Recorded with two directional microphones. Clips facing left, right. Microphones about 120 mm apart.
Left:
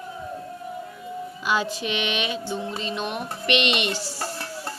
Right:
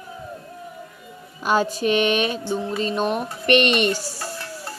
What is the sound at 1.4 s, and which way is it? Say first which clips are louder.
Speech: right 6 dB; 45° right (ahead or behind).